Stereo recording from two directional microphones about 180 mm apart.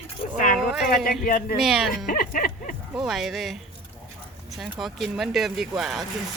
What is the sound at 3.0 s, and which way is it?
Speech, centre (ahead or behind).